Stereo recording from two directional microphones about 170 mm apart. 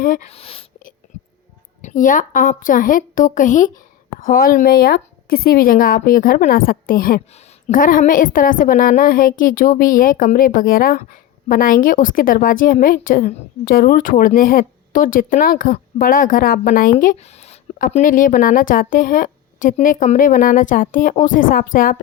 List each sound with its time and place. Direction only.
0.0 s a woman's voice: 55° left (ahead or behind)
0.3 s speech: 35° left (ahead or behind)
1.8 s a woman's voice: 50° left (ahead or behind)
17.2 s a sound: 40° left (ahead or behind)
17.7 s speech: 55° left (ahead or behind)